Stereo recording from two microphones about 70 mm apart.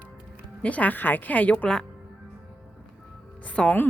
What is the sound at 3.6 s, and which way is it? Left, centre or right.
Speech, centre.